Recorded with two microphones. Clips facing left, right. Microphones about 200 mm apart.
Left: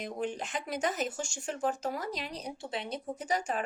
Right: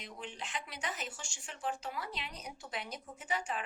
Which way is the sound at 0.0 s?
45° left (ahead or behind).